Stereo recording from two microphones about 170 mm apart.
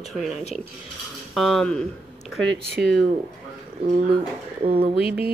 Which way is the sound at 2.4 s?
85° right.